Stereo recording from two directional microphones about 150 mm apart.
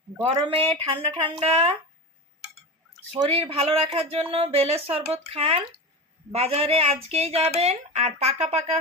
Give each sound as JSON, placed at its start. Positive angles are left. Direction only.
{"t": 0.2, "sound": "speech", "side_deg": -35}
{"t": 3.1, "sound": "a woman's voice", "side_deg": -40}